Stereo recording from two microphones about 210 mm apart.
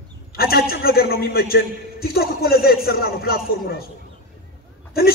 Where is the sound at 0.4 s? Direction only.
45° left (ahead or behind).